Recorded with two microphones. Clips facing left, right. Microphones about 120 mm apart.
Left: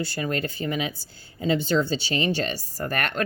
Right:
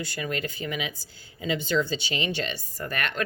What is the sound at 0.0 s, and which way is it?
Speech, 35° left (ahead or behind).